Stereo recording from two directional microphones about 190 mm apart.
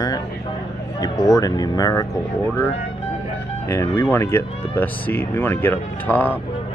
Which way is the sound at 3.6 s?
15° left (ahead or behind).